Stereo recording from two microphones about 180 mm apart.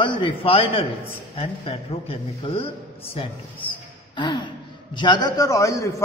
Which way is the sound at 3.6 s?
25° left (ahead or behind).